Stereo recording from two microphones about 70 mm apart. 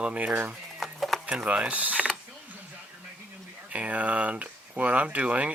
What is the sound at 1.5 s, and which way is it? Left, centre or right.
Speech, centre.